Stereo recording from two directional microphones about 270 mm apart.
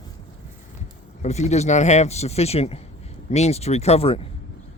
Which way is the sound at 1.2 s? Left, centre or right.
Left.